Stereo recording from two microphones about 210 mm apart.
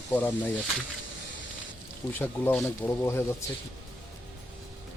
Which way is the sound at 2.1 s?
10° left (ahead or behind).